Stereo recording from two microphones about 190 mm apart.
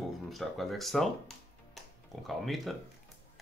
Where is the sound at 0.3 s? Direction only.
Centre (ahead or behind).